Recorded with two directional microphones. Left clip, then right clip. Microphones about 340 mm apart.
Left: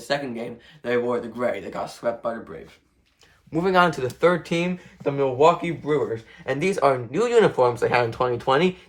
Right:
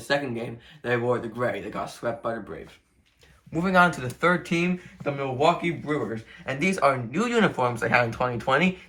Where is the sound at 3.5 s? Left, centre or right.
Left.